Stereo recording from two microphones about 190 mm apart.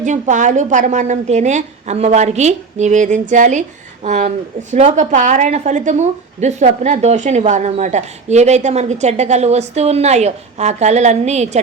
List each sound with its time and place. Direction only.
0.0 s a woman's voice: 40° right (ahead or behind)